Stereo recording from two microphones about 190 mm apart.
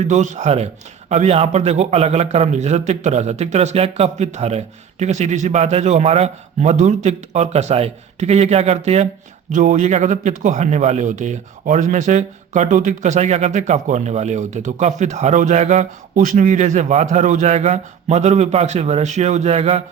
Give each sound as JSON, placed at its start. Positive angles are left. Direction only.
{"t": 0.1, "sound": "speech", "side_deg": -40}